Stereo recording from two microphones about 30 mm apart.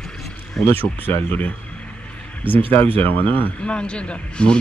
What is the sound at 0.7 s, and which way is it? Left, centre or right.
Speech, left.